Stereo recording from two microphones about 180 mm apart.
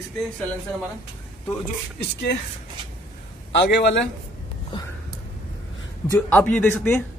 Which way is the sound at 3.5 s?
75° left (ahead or behind).